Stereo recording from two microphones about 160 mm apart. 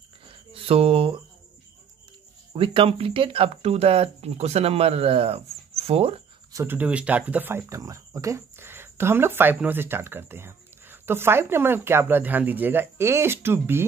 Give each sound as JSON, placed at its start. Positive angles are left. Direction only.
{"t": 0.3, "sound": "music", "side_deg": -35}
{"t": 2.5, "sound": "speech", "side_deg": -35}
{"t": 6.5, "sound": "speech", "side_deg": -15}